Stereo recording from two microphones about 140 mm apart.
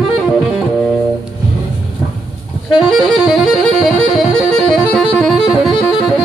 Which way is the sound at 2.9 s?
Centre (ahead or behind).